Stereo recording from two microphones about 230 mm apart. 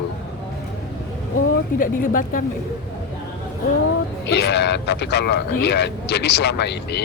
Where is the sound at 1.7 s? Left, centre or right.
Left.